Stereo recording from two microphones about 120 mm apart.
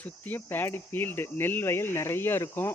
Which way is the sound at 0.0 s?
15° left (ahead or behind).